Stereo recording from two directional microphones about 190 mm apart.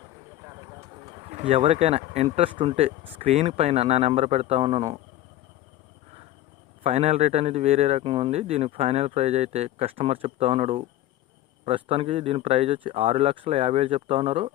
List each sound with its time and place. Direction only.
1.0 s speech: 30° right (ahead or behind)
6.8 s speech: 35° right (ahead or behind)